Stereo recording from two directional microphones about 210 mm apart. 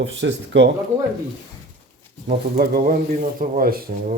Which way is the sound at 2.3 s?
45° right (ahead or behind).